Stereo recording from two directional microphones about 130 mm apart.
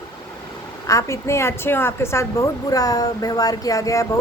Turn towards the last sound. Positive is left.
turn(degrees=25)  # may be behind; listen again after turning